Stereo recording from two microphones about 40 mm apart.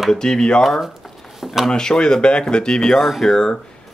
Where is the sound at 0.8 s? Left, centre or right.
Centre.